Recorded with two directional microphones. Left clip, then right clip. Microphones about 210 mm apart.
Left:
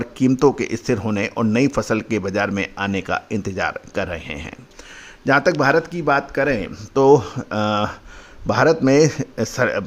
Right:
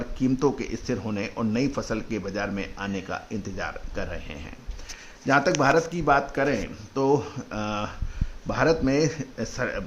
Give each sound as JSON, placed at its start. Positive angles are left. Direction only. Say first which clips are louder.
{"t": 0.0, "sound": "speech", "louder": "left 8 dB", "side_deg": 35}
{"t": 6.9, "sound": "speech", "louder": "left 10 dB", "side_deg": 40}